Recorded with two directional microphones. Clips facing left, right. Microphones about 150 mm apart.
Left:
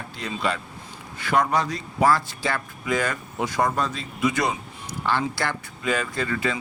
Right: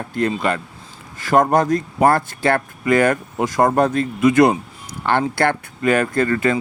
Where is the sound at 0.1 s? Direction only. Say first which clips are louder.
Right 8 dB; 55° right (ahead or behind).